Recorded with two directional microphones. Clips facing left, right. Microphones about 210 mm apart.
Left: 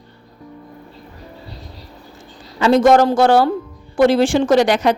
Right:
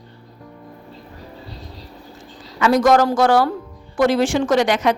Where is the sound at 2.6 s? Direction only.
25° left (ahead or behind).